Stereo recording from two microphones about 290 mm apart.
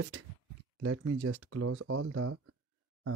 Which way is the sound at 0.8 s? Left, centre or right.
Right.